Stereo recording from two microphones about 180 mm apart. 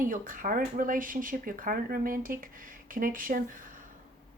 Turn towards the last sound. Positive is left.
turn(degrees=-50)  # may be behind; listen again after turning